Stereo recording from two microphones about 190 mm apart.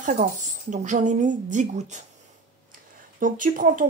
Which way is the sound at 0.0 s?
40° right (ahead or behind).